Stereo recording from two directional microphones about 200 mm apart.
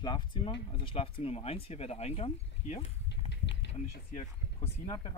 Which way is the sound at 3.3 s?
60° left (ahead or behind).